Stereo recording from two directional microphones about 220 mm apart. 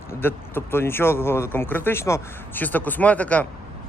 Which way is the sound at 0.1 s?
10° left (ahead or behind).